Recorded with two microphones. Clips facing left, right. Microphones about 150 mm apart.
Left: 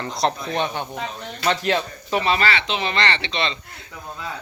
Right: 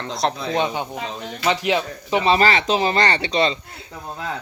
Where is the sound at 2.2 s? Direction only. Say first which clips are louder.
Right 6 dB; 35° right (ahead or behind).